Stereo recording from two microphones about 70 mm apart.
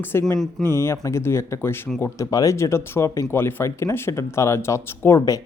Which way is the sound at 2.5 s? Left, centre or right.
Left.